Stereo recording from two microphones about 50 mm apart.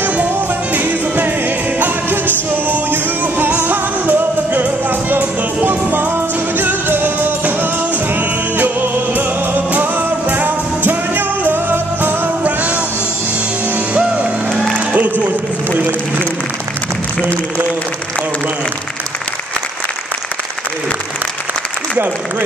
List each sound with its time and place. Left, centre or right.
0.7 s music: right
13.9 s music: right